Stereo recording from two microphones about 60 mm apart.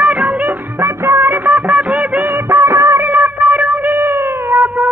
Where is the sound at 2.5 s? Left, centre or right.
Right.